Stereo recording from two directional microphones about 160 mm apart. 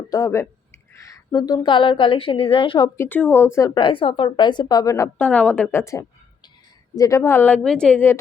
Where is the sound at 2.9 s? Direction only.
10° left (ahead or behind).